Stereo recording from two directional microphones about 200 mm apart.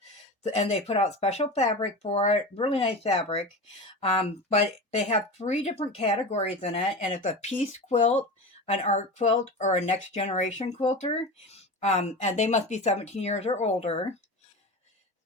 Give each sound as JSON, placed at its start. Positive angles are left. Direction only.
{"t": 0.4, "sound": "speech", "side_deg": 35}